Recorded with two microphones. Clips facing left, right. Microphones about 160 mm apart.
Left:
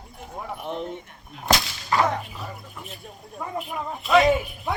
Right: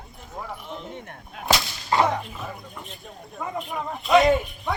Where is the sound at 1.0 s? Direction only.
60° right (ahead or behind).